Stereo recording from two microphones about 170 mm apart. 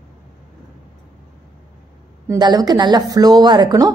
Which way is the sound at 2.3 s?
25° right (ahead or behind).